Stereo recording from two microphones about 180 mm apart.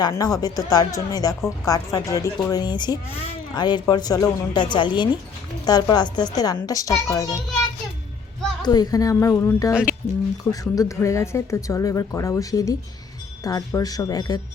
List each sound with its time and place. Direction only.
0.0 s speech: 20° left (ahead or behind)
8.6 s speech: 20° left (ahead or behind)